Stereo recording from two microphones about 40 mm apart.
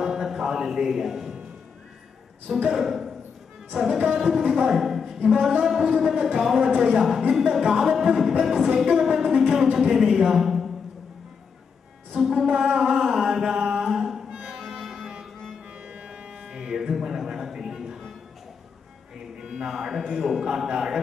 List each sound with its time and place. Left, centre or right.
0.0 s a sound: centre
2.5 s music: centre
4.6 s a woman's voice: centre
5.6 s music: centre
8.7 s a woman's voice: centre
9.4 s music: centre
10.2 s a sound: centre
12.2 s music: centre
13.6 s mantra: right
13.8 s music: centre
15.7 s music: right; by 18.0 s centre
19.4 s a sound: centre
19.7 s music: centre
20.4 s music: centre